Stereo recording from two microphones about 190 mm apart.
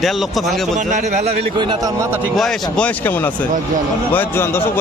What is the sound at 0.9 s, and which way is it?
A man's voice, 40° right (ahead or behind).